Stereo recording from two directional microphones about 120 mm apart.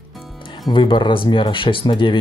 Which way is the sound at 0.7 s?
40° left (ahead or behind).